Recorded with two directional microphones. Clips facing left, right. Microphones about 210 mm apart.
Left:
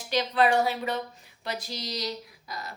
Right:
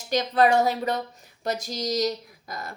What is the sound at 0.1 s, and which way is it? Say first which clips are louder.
Speech: right 3 dB; 45° right (ahead or behind).